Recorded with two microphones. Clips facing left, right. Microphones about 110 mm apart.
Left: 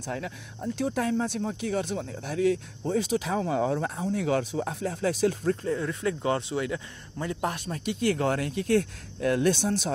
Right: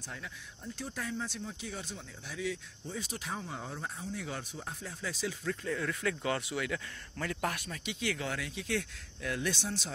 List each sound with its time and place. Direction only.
0.0 s speech: 65° left (ahead or behind); by 7.8 s 30° left (ahead or behind)
7.8 s speech: 45° left (ahead or behind)